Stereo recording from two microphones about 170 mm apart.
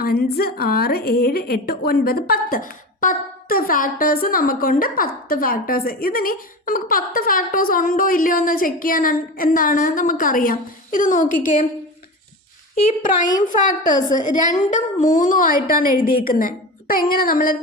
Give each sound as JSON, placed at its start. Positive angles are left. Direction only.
{"t": 0.0, "sound": "a woman's voice", "side_deg": 65}
{"t": 13.3, "sound": "a woman's voice", "side_deg": 50}